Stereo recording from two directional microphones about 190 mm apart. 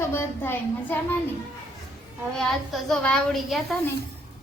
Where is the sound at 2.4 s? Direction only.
5° left (ahead or behind).